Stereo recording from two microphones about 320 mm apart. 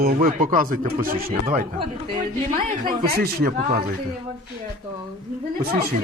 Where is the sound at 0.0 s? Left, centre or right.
Right.